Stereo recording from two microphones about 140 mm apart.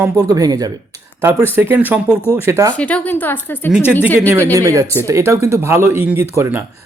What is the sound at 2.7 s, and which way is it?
Speech, 10° left (ahead or behind).